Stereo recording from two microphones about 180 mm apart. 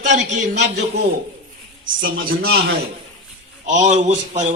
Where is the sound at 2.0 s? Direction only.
50° right (ahead or behind).